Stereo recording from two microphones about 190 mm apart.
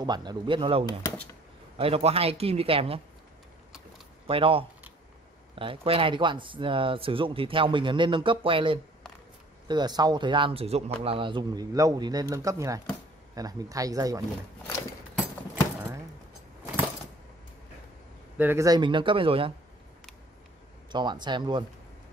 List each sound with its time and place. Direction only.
0.0 s speech: 20° right (ahead or behind)
4.3 s speech: 30° right (ahead or behind)
18.4 s speech: 15° right (ahead or behind)
20.9 s speech: 25° right (ahead or behind)